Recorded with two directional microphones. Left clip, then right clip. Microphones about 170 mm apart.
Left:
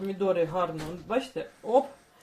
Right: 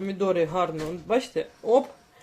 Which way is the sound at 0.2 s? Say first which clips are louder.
Right 2 dB; 50° right (ahead or behind).